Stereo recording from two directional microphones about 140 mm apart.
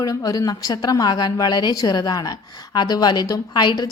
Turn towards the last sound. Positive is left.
turn(degrees=30)  # may be behind; listen again after turning